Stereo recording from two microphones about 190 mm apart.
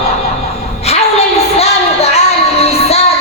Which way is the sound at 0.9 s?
35° left (ahead or behind).